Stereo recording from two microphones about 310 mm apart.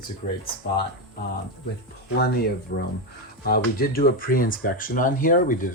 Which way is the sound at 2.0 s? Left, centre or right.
Left.